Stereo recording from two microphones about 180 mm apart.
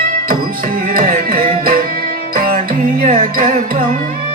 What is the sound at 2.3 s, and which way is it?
Music, 55° right (ahead or behind).